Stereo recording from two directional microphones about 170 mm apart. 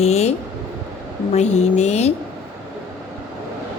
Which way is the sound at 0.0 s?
40° left (ahead or behind).